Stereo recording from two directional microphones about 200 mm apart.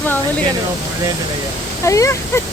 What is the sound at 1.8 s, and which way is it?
Speech, 15° left (ahead or behind).